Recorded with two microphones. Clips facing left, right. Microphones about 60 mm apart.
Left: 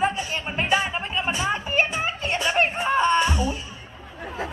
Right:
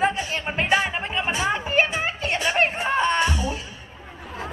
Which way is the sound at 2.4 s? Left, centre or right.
Right.